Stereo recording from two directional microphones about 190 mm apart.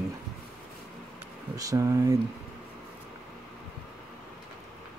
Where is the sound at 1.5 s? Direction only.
20° right (ahead or behind).